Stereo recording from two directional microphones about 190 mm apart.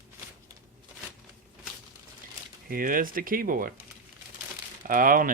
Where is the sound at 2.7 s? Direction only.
45° right (ahead or behind).